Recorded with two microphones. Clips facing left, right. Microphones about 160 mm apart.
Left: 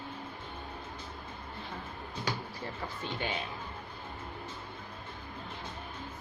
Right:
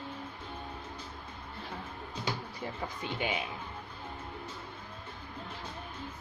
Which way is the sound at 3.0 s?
10° right (ahead or behind).